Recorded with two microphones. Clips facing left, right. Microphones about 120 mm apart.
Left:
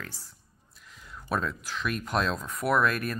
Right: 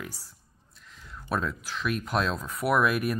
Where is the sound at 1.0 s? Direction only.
Centre (ahead or behind).